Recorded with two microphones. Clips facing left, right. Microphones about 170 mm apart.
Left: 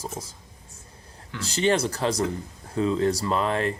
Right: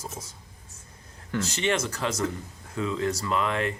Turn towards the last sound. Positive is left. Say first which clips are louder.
# left 2 dB
turn(degrees=35)  # may be behind; listen again after turning